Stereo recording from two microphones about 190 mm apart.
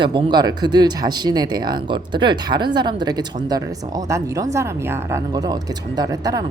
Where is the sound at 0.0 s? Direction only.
25° right (ahead or behind).